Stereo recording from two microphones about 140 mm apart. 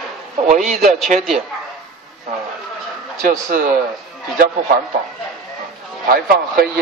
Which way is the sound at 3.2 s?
80° right.